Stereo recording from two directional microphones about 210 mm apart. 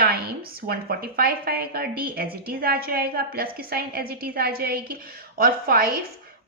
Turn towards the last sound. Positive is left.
turn(degrees=-45)  # may be behind; listen again after turning